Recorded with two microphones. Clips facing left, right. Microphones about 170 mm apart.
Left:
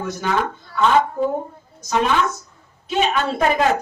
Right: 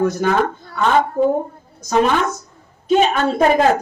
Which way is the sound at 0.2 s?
45° right (ahead or behind).